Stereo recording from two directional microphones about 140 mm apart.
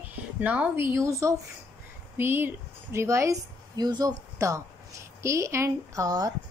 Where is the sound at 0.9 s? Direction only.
20° right (ahead or behind).